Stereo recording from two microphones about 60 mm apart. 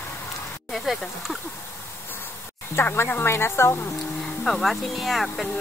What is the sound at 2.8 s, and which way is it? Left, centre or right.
Speech, left.